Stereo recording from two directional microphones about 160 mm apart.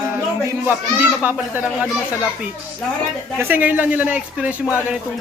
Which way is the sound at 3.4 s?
10° right (ahead or behind).